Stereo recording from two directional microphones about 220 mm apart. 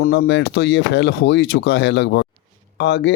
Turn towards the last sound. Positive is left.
turn(degrees=55)  # may be behind; listen again after turning